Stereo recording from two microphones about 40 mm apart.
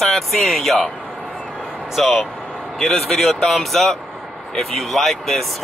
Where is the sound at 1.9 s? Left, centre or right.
Centre.